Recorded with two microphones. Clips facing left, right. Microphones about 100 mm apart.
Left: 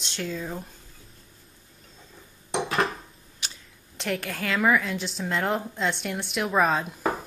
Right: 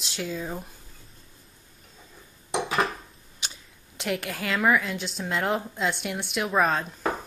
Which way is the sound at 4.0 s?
5° right (ahead or behind).